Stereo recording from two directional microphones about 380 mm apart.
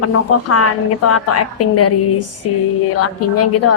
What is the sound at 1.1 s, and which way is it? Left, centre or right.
Speech, left.